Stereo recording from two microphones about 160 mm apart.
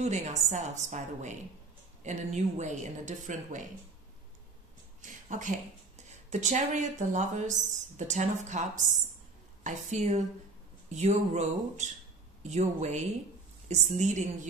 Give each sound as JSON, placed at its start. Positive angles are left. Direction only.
{"t": 0.0, "sound": "speech", "side_deg": -45}
{"t": 5.0, "sound": "speech", "side_deg": -50}